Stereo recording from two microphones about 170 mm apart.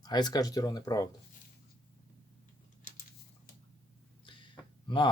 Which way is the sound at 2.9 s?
50° left (ahead or behind).